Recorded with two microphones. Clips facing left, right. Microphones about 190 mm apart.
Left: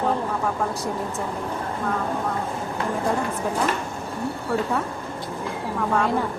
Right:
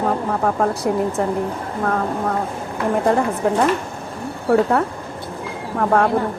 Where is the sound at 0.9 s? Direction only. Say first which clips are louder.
Right 8 dB; 65° right (ahead or behind).